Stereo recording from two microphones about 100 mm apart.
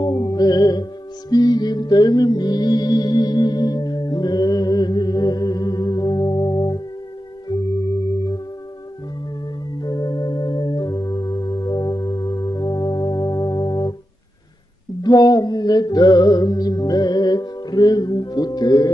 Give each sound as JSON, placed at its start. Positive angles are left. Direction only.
{"t": 0.0, "sound": "music", "side_deg": 40}
{"t": 9.8, "sound": "organ", "side_deg": 40}
{"t": 15.0, "sound": "music", "side_deg": 40}